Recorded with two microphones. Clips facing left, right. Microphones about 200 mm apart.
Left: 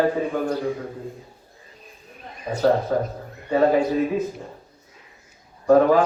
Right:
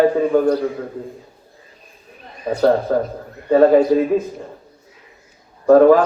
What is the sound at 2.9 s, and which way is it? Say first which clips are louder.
Speech: right 4 dB; 45° right (ahead or behind).